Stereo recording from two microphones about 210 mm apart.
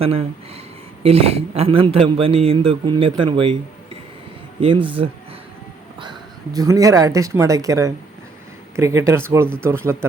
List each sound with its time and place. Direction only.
0.0 s a man's voice: 30° right (ahead or behind)
4.6 s a man's voice: 25° right (ahead or behind)
6.0 s speech: 20° right (ahead or behind)